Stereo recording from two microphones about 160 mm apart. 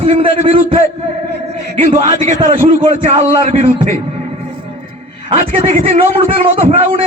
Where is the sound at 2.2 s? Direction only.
55° right (ahead or behind).